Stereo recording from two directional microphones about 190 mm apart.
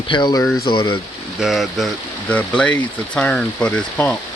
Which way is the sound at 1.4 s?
Centre (ahead or behind).